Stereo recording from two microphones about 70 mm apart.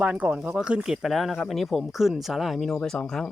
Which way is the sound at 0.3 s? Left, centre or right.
Centre.